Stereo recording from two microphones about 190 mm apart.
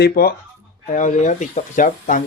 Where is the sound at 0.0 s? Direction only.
50° left (ahead or behind).